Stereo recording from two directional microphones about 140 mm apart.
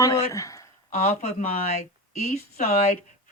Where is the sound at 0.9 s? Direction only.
50° left (ahead or behind).